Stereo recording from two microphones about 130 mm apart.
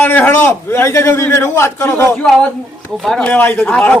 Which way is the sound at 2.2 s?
10° left (ahead or behind).